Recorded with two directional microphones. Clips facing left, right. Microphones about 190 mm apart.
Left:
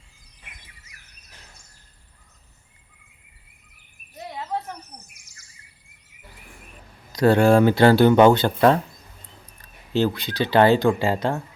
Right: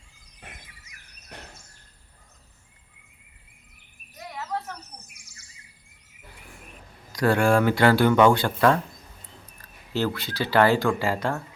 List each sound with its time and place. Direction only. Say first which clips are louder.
1.3 s a sound: right 10 dB; 65° right (ahead or behind)
4.2 s insect: left 3 dB; 25° left (ahead or behind)
7.1 s speech: left 5 dB; 25° left (ahead or behind)
9.9 s speech: left 5 dB; 20° left (ahead or behind)